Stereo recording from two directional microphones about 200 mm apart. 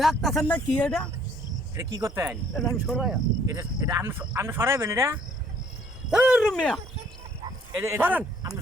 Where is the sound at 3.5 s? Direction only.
15° right (ahead or behind).